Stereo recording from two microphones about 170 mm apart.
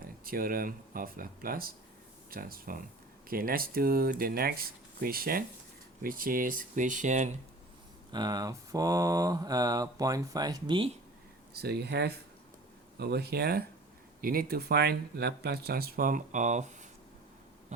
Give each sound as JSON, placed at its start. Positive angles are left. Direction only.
{"t": 0.3, "sound": "speech", "side_deg": -60}
{"t": 8.1, "sound": "speech", "side_deg": -25}
{"t": 11.5, "sound": "speech", "side_deg": -70}
{"t": 17.7, "sound": "hum", "side_deg": -45}